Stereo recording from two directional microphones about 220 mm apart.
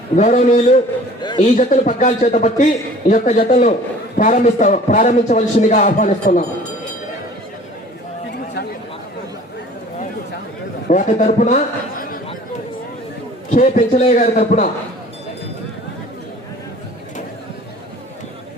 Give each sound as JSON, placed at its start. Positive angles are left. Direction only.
{"t": 0.2, "sound": "a man's voice", "side_deg": 30}
{"t": 1.2, "sound": "a sound", "side_deg": 20}
{"t": 1.5, "sound": "a man's voice", "side_deg": 35}
{"t": 10.8, "sound": "a man's voice", "side_deg": 35}
{"t": 13.5, "sound": "a man's voice", "side_deg": 35}